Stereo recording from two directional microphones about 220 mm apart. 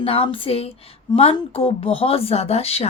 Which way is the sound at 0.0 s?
25° left (ahead or behind).